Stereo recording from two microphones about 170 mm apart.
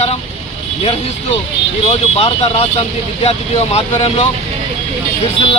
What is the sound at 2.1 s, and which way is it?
Speech, 40° left (ahead or behind).